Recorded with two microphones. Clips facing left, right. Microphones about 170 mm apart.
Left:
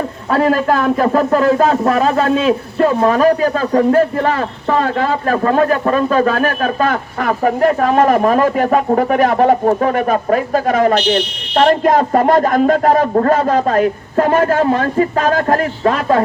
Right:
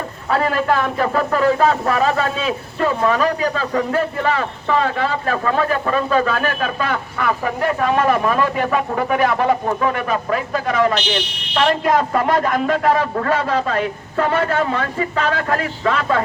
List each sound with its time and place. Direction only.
0.3 s a man's voice: 40° left (ahead or behind)